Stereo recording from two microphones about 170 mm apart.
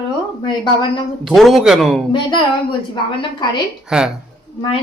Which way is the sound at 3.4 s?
25° left (ahead or behind).